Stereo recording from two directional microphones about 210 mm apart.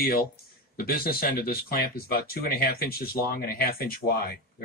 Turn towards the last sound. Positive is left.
turn(degrees=45)  # may be behind; listen again after turning